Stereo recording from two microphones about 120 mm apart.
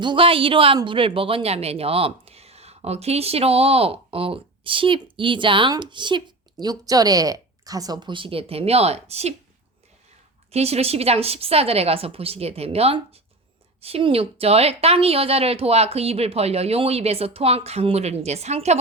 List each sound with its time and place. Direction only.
0.0 s speech: 45° right (ahead or behind); by 9.3 s 60° right (ahead or behind)
10.5 s a woman's voice: 60° right (ahead or behind)